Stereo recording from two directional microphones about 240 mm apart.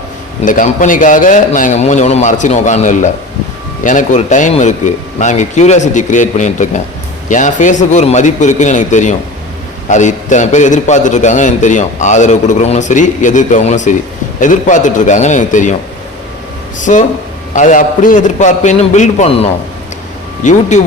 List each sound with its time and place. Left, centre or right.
0.4 s a man's voice: left
16.8 s a man's voice: left